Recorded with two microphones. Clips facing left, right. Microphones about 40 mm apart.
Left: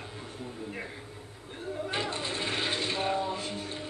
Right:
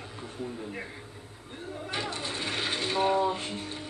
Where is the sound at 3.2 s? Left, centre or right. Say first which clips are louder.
Right 4 dB; right.